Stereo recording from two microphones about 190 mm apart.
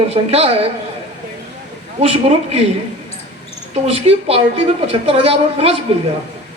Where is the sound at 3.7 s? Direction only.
30° right (ahead or behind).